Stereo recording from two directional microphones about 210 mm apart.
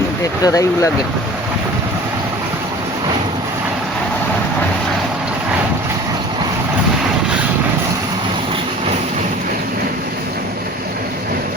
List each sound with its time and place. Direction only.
0.4 s speech: 15° left (ahead or behind)